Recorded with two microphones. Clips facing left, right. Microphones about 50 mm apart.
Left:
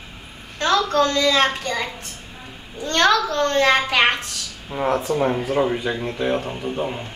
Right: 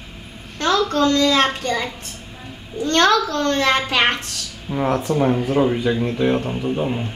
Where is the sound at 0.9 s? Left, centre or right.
Left.